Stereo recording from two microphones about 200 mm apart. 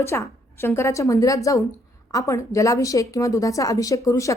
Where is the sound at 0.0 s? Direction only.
15° left (ahead or behind).